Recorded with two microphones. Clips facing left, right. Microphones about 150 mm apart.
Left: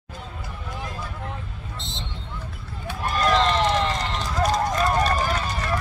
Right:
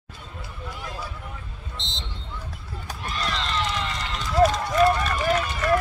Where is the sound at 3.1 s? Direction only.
45° left (ahead or behind).